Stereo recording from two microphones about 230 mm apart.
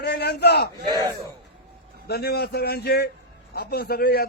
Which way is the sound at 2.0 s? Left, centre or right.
Left.